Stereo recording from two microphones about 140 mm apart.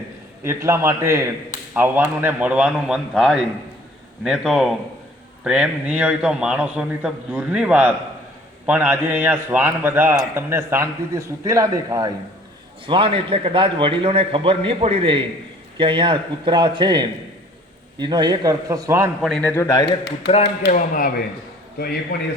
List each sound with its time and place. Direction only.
0.4 s a man's voice: 20° right (ahead or behind)
12.8 s a man's voice: 40° right (ahead or behind); by 19.1 s 20° right (ahead or behind)
19.4 s a man's voice: 15° left (ahead or behind)
19.7 s a man's voice: 30° left (ahead or behind)
20.7 s speech: 85° left
22.1 s a man's voice: 90° left